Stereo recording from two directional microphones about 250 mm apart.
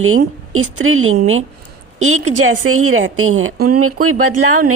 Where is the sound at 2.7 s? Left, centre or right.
Right.